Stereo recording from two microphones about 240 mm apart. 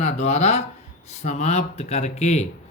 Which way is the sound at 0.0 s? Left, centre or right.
Left.